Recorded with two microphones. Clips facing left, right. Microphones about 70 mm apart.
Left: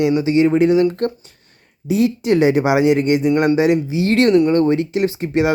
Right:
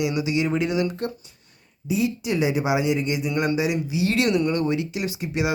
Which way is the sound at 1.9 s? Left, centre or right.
Left.